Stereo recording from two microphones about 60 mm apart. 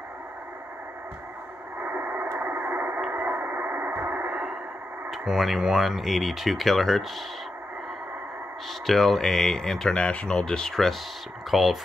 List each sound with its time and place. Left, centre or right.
1.8 s radio: right
4.1 s radio: centre
5.1 s speech: centre
8.8 s speech: centre